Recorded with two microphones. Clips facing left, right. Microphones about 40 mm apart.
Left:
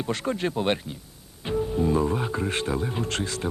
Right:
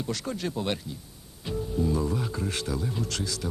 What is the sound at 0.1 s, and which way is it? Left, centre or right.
Speech, left.